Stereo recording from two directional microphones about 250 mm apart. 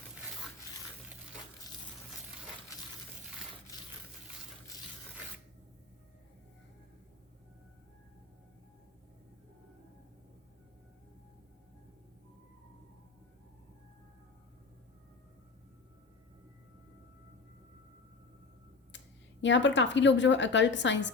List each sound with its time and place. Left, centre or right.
18.9 s speech: left